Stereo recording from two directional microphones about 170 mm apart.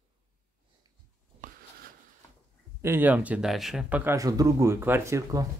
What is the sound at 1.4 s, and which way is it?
Writing, 50° right (ahead or behind).